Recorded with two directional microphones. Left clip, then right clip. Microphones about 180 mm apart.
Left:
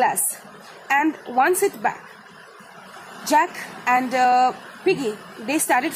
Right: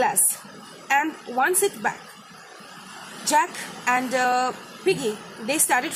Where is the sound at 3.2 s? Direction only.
25° left (ahead or behind).